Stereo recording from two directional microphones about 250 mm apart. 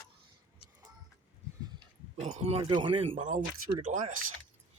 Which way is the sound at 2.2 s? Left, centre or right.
Right.